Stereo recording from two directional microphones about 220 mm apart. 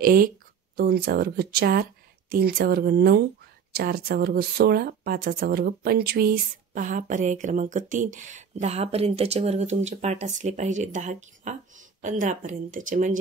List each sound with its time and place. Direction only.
0.0 s speech: 40° right (ahead or behind)